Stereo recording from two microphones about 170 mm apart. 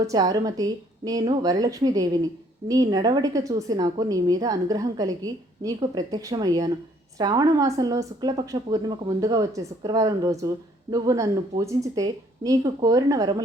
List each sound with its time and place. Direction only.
0.0 s a woman's voice: 20° right (ahead or behind)